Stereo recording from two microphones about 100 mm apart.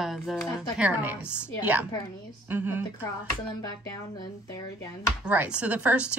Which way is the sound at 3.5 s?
35° left (ahead or behind).